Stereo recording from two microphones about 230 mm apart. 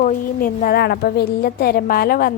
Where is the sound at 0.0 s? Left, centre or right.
Left.